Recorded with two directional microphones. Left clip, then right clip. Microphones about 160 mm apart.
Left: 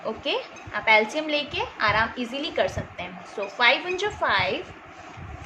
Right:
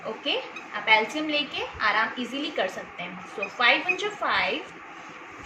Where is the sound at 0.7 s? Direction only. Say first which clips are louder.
Left 2 dB; 45° left (ahead or behind).